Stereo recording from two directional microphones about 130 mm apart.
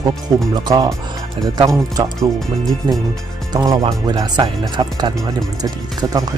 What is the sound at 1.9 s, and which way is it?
Speech, 30° right (ahead or behind).